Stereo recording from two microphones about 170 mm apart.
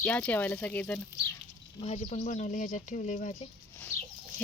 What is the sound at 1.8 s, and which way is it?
Speech, 40° left (ahead or behind).